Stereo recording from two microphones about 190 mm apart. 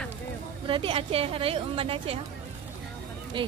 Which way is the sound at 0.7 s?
30° right (ahead or behind).